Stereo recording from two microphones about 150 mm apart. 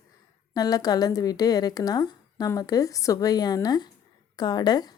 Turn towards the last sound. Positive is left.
turn(degrees=25)  # may be behind; listen again after turning